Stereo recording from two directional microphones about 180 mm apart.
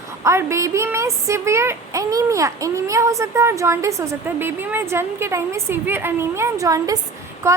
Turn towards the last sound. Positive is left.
turn(degrees=-15)  # may be behind; listen again after turning